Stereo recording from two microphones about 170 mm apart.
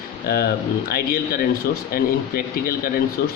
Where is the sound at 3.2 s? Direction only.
80° left.